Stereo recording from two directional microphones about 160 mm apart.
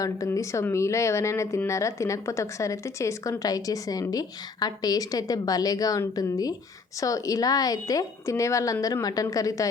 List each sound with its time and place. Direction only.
0.0 s speech: 20° left (ahead or behind)